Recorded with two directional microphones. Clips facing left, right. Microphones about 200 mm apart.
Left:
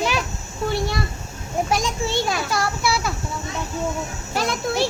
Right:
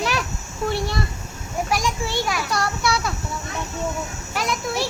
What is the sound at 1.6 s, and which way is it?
Speech, 25° left (ahead or behind).